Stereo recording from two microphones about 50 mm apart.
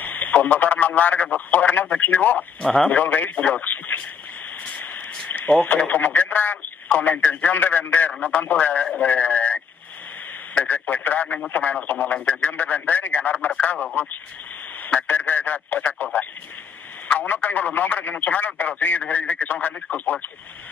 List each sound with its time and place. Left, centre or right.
0.0 s speech: left
4.6 s a sound: left
5.6 s speech: left
10.6 s speech: left
15.0 s speech: left